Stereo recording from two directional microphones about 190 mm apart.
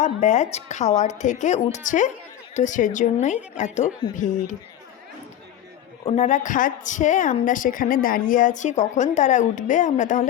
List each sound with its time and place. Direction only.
0.0 s a woman's voice: 40° left (ahead or behind)
6.1 s a woman's voice: 40° left (ahead or behind)